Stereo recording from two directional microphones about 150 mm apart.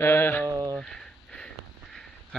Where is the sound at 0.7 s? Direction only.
5° left (ahead or behind).